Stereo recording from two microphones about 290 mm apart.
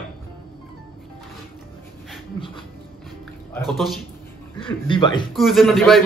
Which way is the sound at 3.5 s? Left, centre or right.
Centre.